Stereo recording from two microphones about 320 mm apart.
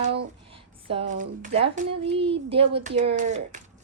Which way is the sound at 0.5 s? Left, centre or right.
Centre.